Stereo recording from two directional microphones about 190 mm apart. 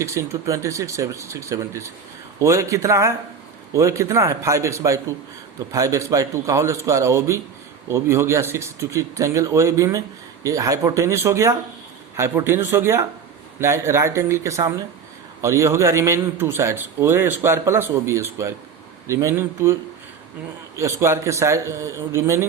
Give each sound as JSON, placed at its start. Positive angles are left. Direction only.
{"t": 0.0, "sound": "a man's voice", "side_deg": -15}
{"t": 20.7, "sound": "a man's voice", "side_deg": -15}